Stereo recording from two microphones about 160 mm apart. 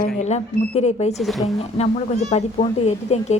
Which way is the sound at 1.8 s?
45° left (ahead or behind).